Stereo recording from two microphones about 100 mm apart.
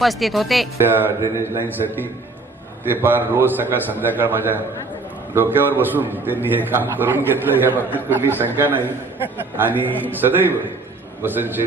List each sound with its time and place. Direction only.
0.0 s speech: centre (ahead or behind)
0.8 s a man's voice: 20° right (ahead or behind)